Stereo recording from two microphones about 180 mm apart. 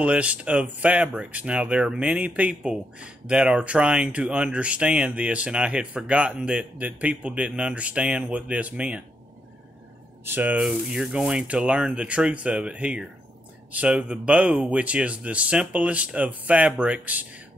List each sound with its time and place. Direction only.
0.0 s speech: 5° right (ahead or behind)
10.2 s speech: 10° right (ahead or behind)